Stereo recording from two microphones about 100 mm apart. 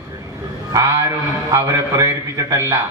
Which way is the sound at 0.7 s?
30° right (ahead or behind).